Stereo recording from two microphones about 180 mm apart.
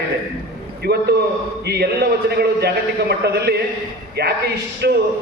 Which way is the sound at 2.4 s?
65° right (ahead or behind).